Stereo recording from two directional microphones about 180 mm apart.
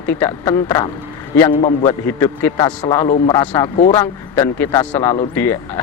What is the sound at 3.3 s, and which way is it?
Speech, 20° left (ahead or behind).